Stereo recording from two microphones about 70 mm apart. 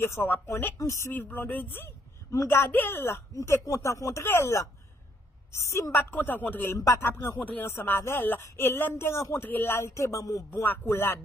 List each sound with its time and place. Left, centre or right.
0.0 s speech: left
0.7 s speech: left
1.1 s speech: left
3.3 s speech: left
5.9 s speech: left
9.4 s speech: left
9.8 s speech: left
10.6 s speech: left